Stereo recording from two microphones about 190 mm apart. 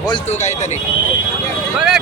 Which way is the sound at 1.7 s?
5° right (ahead or behind).